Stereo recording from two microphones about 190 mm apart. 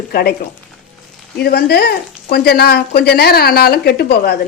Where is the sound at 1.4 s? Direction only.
55° left (ahead or behind).